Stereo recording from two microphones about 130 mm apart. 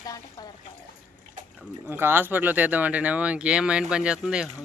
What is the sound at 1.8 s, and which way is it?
Speech, 15° right (ahead or behind).